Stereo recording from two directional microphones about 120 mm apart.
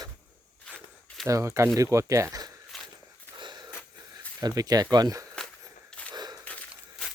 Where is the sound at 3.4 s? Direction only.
40° right (ahead or behind).